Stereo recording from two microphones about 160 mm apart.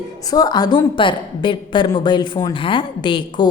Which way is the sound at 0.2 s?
25° left (ahead or behind).